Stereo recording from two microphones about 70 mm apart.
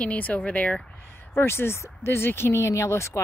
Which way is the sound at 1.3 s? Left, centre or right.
Left.